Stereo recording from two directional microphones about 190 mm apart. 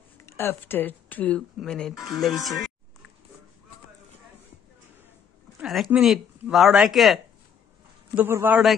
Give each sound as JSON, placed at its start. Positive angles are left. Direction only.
{"t": 0.2, "sound": "speech", "side_deg": 15}
{"t": 5.6, "sound": "a man's voice", "side_deg": -5}